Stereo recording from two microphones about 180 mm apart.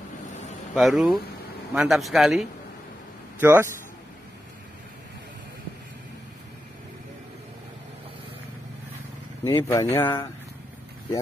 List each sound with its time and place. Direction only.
0.7 s a man's voice: centre (ahead or behind)
3.3 s speech: 10° right (ahead or behind)
9.4 s speech: 25° left (ahead or behind)
9.7 s speech: 15° left (ahead or behind)